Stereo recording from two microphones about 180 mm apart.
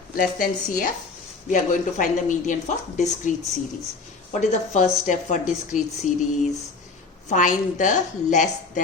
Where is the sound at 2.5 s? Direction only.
40° left (ahead or behind).